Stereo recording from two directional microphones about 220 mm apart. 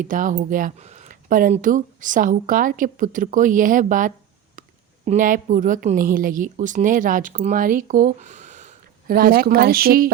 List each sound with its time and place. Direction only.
0.0 s a woman's voice: 35° right (ahead or behind)
4.6 s a sound: 35° right (ahead or behind)
5.0 s a woman's voice: 35° right (ahead or behind)